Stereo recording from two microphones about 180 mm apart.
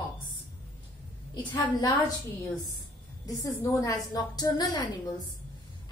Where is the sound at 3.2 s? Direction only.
15° left (ahead or behind).